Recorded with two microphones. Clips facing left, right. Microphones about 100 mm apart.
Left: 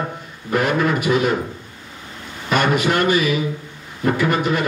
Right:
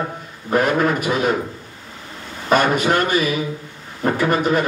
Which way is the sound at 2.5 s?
40° right (ahead or behind).